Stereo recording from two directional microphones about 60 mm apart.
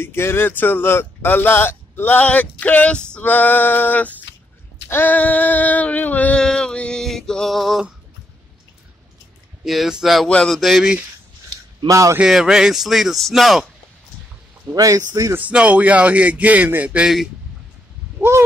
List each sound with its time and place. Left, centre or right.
0.0 s speech: left; by 3.1 s centre
3.2 s speech: left
5.0 s a sound: left
6.4 s music: centre
9.7 s speech: centre
10.2 s speech: centre
10.6 s speech: centre
11.9 s a man's voice: right
12.3 s speech: centre
14.8 s a man's voice: right
15.5 s speech: right